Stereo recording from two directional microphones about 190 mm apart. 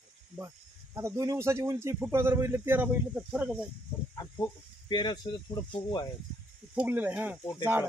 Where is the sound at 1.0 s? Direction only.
15° right (ahead or behind).